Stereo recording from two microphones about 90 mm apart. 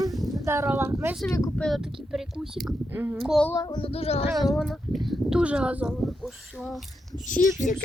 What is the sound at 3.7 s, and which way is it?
Speech, 90° left.